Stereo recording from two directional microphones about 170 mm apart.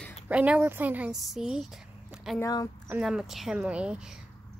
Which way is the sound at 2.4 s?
20° left (ahead or behind).